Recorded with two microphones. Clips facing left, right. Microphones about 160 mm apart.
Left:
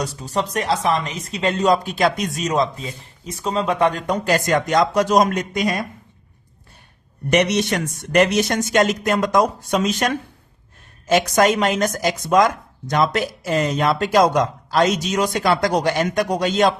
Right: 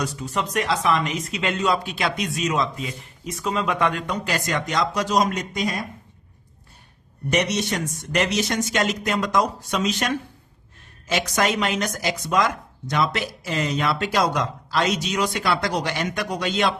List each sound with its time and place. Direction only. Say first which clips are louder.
0.0 s speech: left 3 dB; 35° left (ahead or behind); by 5.7 s 60° left (ahead or behind)
7.3 s speech: left 5 dB; 65° left (ahead or behind); by 16.7 s 40° left (ahead or behind)